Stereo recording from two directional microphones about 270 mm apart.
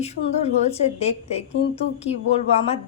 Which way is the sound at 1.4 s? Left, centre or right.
Left.